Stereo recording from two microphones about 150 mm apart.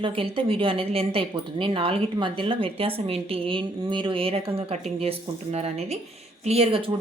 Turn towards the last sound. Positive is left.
turn(degrees=-40)  # may be behind; listen again after turning